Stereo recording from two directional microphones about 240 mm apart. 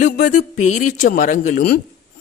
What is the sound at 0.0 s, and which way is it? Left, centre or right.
A woman's voice, left.